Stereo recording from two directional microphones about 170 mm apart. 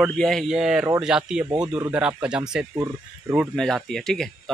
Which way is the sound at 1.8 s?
10° right (ahead or behind).